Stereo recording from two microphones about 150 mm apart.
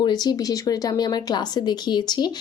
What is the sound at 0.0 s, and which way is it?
Speech, 30° left (ahead or behind).